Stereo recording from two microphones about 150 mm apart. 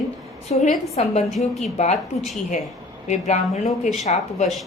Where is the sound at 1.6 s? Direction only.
45° left (ahead or behind).